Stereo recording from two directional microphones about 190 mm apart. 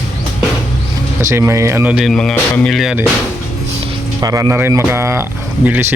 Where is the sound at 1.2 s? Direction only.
15° right (ahead or behind).